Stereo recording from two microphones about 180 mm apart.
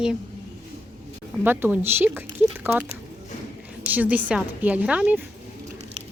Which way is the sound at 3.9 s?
10° right (ahead or behind).